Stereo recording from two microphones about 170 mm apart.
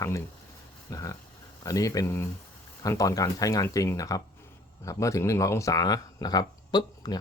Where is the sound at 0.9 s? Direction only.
20° left (ahead or behind).